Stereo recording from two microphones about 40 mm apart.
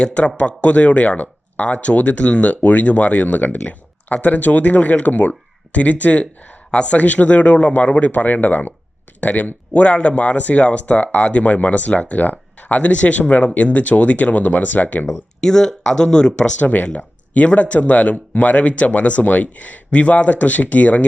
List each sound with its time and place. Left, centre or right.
0.1 s speech: left
15.4 s speech: centre
16.6 s speech: left
16.8 s speech: left